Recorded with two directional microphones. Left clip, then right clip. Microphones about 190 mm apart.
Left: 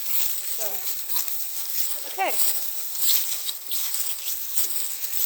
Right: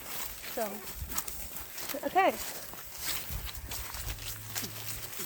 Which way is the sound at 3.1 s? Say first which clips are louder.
Left 11 dB; 45° left (ahead or behind).